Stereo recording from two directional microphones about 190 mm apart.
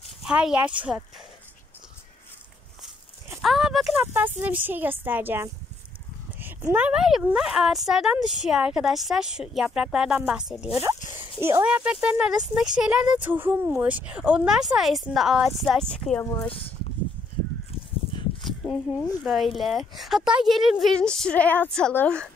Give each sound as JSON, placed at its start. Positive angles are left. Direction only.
{"t": 0.2, "sound": "speech", "side_deg": -5}
{"t": 3.4, "sound": "a woman's voice", "side_deg": 0}
{"t": 16.4, "sound": "speech", "side_deg": 30}
{"t": 18.4, "sound": "a sound", "side_deg": 0}
{"t": 19.2, "sound": "a woman's voice", "side_deg": 0}